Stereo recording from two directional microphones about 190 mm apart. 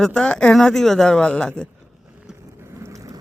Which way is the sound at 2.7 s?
15° right (ahead or behind).